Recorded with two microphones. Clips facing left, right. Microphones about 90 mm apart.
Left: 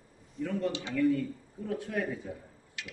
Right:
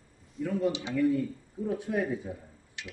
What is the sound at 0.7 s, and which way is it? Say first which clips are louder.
Speech: right 1 dB; 15° right (ahead or behind).